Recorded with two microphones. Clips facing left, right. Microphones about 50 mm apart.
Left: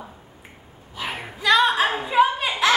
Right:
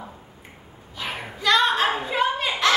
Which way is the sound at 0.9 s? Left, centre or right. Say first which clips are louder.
Left 1 dB; centre.